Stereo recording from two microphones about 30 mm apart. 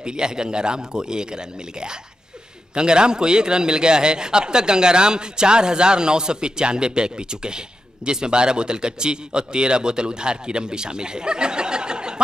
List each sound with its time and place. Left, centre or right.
0.0 s a man's voice: right